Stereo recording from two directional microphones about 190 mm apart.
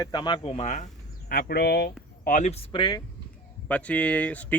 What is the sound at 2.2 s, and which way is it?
Speech, 40° left (ahead or behind).